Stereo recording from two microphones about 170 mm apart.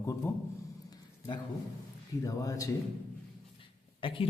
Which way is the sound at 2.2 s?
20° left (ahead or behind).